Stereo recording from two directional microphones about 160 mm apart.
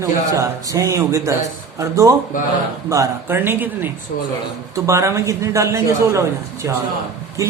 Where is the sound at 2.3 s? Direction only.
55° left (ahead or behind).